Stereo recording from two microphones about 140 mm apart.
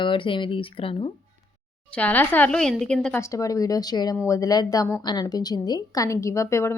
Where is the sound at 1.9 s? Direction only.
10° left (ahead or behind).